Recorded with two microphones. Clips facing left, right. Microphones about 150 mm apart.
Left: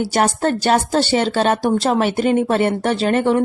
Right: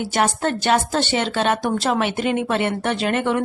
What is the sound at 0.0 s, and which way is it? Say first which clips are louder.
Speech: left 3 dB; 35° left (ahead or behind).